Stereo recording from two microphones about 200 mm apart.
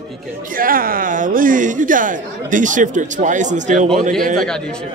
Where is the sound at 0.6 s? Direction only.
45° right (ahead or behind).